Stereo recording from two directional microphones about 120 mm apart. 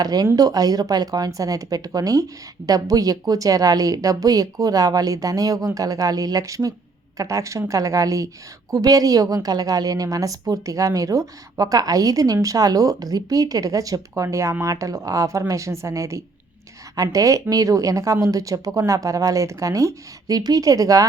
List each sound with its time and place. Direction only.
0.0 s a woman's voice: 35° right (ahead or behind)